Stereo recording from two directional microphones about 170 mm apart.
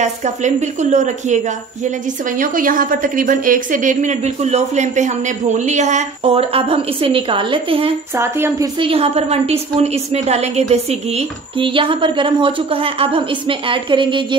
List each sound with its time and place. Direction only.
0.0 s a woman's voice: 45° right (ahead or behind)
8.2 s speech: 15° right (ahead or behind)
8.7 s a woman's voice: 35° right (ahead or behind)